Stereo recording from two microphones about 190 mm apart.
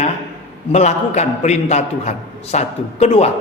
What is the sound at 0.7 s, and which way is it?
A man's voice, 35° left (ahead or behind).